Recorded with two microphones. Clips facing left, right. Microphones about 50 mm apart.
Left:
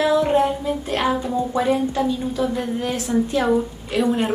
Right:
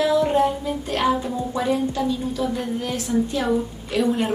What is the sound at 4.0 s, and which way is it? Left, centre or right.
Speech, centre.